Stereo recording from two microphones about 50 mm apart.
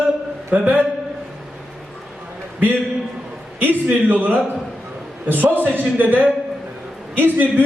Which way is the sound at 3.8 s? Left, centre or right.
Right.